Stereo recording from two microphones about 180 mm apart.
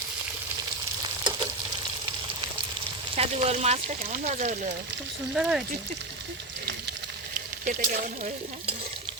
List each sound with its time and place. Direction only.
3.2 s speech: 35° right (ahead or behind)
5.3 s speech: 5° right (ahead or behind)
7.6 s stir: 45° right (ahead or behind)